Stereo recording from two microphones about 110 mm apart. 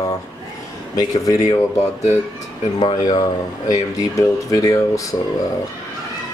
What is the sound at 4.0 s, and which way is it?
Speech, 30° left (ahead or behind).